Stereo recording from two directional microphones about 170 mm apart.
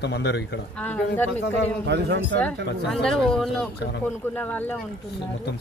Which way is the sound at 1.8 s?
80° right.